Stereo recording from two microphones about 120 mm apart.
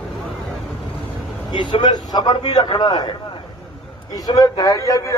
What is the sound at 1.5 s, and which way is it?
A man's voice, 40° left (ahead or behind).